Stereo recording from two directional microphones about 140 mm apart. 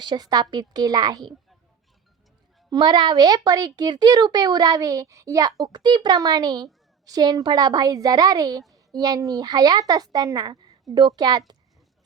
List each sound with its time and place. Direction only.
0.0 s a woman's voice: 30° right (ahead or behind)
2.6 s a woman's voice: 30° right (ahead or behind)